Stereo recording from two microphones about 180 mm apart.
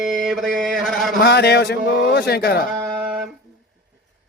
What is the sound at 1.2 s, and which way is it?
A man's voice, 65° left (ahead or behind).